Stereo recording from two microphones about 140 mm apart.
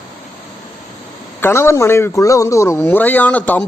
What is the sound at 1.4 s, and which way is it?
Speech, 15° left (ahead or behind).